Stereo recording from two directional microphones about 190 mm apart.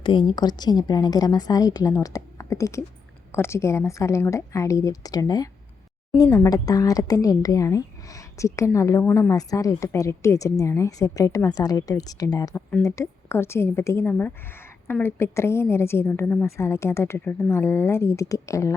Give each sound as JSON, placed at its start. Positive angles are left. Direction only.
{"t": 0.0, "sound": "a woman's voice", "side_deg": 25}